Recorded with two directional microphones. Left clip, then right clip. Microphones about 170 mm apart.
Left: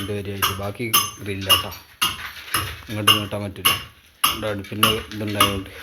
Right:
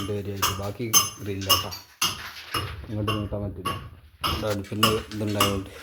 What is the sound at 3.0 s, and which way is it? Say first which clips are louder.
Speech: left 11 dB; 25° left (ahead or behind).